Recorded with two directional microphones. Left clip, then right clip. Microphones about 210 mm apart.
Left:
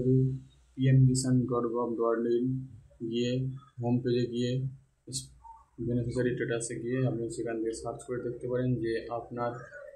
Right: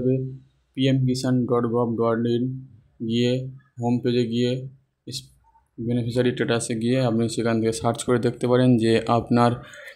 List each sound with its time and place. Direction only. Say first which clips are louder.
0.7 s speech: right 7 dB; 30° right (ahead or behind)
5.9 s speech: right 8 dB; 30° right (ahead or behind); by 9.5 s 50° right (ahead or behind)